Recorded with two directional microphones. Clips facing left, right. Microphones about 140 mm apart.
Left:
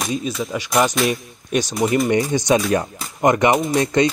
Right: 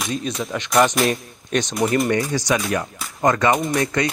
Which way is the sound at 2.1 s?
20° left (ahead or behind).